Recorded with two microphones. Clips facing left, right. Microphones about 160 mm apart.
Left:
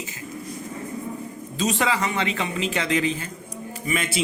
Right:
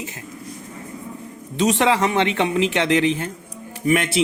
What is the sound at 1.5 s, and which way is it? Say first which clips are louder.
A man's voice: right 6 dB; 75° right (ahead or behind).